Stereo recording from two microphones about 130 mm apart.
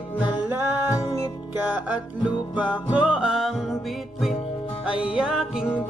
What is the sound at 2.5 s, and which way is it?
Music, 10° right (ahead or behind).